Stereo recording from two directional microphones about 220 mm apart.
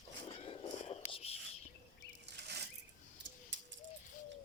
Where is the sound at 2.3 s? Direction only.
50° right (ahead or behind).